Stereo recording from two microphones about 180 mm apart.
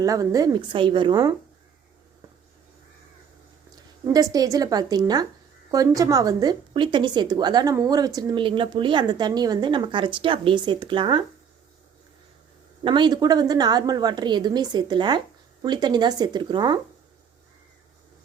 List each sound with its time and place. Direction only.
0.0 s a woman's voice: 20° right (ahead or behind)
4.0 s a woman's voice: 20° right (ahead or behind)
12.8 s a woman's voice: 25° right (ahead or behind)